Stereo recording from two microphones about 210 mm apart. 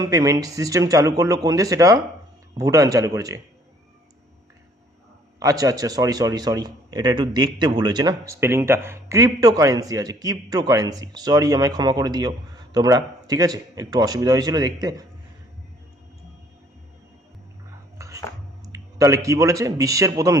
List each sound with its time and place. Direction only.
0.0 s a man's voice: 15° right (ahead or behind)
5.4 s a man's voice: 15° right (ahead or behind)
17.9 s chopping: 15° right (ahead or behind)
18.6 s a man's voice: 15° right (ahead or behind)